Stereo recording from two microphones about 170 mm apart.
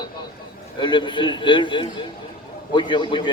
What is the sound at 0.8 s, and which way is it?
A man's voice, 30° left (ahead or behind).